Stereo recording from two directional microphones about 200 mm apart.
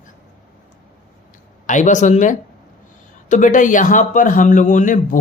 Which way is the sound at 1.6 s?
40° left (ahead or behind).